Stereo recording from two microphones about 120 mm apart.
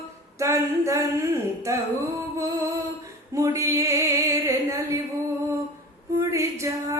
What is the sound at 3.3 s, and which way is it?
Music, 25° right (ahead or behind).